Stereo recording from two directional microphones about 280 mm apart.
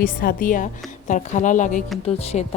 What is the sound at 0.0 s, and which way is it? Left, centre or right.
A woman's voice, left.